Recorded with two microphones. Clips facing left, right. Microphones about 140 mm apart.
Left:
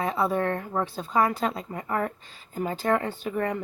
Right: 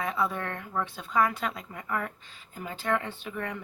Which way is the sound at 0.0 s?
35° left (ahead or behind).